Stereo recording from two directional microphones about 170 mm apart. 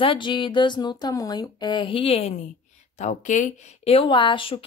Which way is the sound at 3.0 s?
45° left (ahead or behind).